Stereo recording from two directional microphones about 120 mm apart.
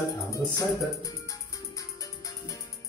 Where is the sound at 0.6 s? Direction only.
30° left (ahead or behind).